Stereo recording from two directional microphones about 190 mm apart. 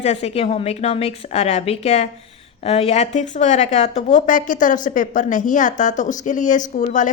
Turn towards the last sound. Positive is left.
turn(degrees=40)  # may be behind; listen again after turning